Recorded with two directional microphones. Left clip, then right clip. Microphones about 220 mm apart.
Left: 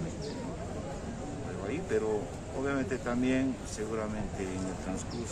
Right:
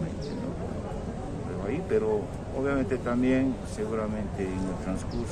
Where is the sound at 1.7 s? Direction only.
5° left (ahead or behind).